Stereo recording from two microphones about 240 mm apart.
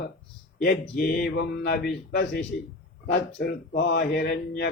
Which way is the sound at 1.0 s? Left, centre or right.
Left.